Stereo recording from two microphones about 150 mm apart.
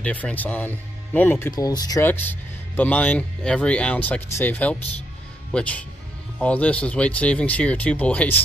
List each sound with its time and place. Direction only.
0.0 s speech: 10° left (ahead or behind)
1.5 s speech: 25° left (ahead or behind)
2.0 s speech: 10° left (ahead or behind)